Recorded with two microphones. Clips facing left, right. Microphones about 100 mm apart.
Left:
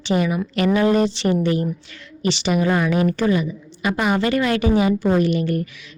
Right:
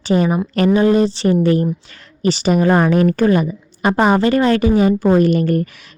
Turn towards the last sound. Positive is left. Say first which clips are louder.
# right 5 dB
turn(degrees=-45)  # may be behind; listen again after turning